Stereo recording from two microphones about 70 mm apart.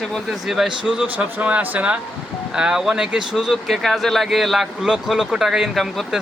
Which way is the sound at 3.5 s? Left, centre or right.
Centre.